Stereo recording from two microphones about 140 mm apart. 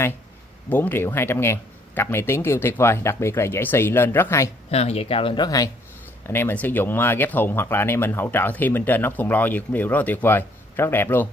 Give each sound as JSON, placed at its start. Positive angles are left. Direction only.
{"t": 0.7, "sound": "speech", "side_deg": 15}
{"t": 4.6, "sound": "speech", "side_deg": 45}
{"t": 6.2, "sound": "speech", "side_deg": 15}